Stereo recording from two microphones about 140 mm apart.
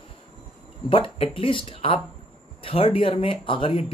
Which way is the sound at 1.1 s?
40° left (ahead or behind).